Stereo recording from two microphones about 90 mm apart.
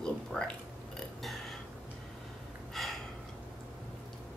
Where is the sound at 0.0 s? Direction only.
10° left (ahead or behind).